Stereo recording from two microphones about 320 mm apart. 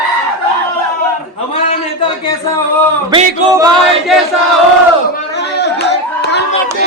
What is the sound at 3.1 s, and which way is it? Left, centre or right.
Male singing, centre.